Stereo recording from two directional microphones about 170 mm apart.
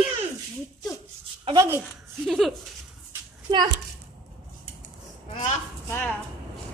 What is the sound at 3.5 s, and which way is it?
Speech, 25° right (ahead or behind).